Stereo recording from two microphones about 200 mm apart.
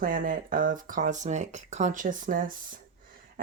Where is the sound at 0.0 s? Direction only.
45° right (ahead or behind).